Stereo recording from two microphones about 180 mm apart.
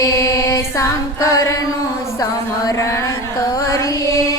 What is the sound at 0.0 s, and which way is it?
Chant, 20° left (ahead or behind).